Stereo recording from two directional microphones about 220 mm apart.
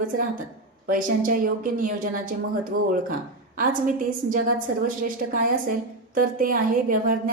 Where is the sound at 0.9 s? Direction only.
40° right (ahead or behind).